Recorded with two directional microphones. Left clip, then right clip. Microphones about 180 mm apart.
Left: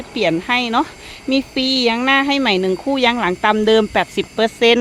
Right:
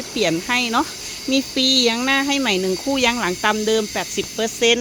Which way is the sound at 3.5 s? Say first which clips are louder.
Left 6 dB; 20° left (ahead or behind).